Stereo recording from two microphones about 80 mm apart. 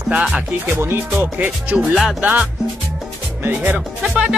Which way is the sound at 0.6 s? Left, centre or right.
Right.